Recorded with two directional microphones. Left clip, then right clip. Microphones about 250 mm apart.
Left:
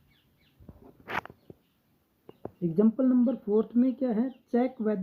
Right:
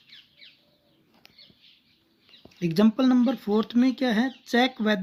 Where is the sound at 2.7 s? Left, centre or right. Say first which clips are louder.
Right 3 dB; right.